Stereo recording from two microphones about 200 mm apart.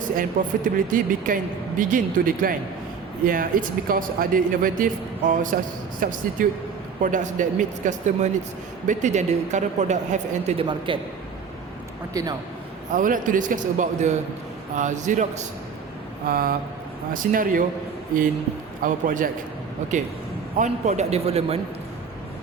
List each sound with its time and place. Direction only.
0.2 s speech: 45° right (ahead or behind)
10.7 s a man's voice: 25° right (ahead or behind)
12.1 s a man's voice: 15° right (ahead or behind)
12.9 s speech: 40° right (ahead or behind)
18.8 s speech: 45° right (ahead or behind)